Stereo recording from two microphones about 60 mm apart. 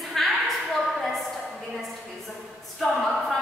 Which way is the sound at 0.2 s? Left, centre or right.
Centre.